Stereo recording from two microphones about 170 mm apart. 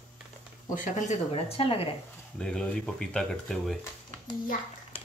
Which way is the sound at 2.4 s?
5° left (ahead or behind).